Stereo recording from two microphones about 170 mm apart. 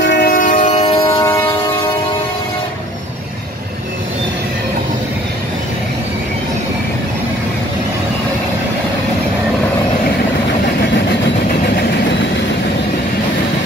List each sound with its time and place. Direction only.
0.0 s train: 75° left (ahead or behind); by 1.2 s 35° left (ahead or behind)